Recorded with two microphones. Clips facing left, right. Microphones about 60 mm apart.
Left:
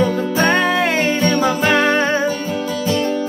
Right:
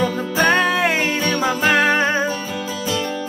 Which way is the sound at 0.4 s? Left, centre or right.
Centre.